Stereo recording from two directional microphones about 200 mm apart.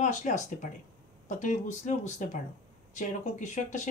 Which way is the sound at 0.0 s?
40° left (ahead or behind).